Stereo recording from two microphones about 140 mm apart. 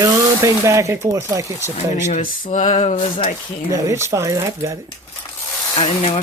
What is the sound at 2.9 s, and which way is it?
Speech, 40° left (ahead or behind).